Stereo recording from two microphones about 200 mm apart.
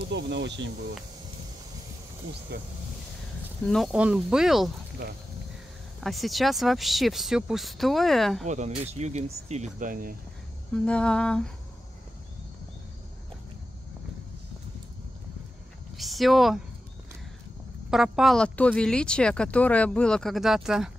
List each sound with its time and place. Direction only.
0.1 s speech: 60° right (ahead or behind)
3.6 s speech: centre (ahead or behind)
5.9 s speech: centre (ahead or behind)
8.5 s speech: 35° right (ahead or behind)
10.7 s speech: 5° left (ahead or behind)
16.0 s speech: centre (ahead or behind)
17.8 s speech: 5° right (ahead or behind)